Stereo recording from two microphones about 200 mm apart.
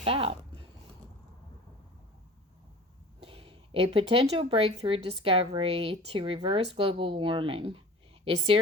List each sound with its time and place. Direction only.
0.0 s speech: 30° right (ahead or behind)
3.2 s a woman's voice: 30° right (ahead or behind)